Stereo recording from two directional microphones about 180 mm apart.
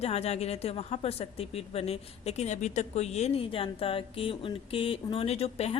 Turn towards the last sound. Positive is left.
turn(degrees=35)  # may be behind; listen again after turning